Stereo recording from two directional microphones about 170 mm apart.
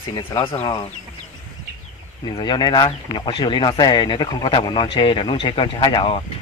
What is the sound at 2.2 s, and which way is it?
Speech, 25° left (ahead or behind).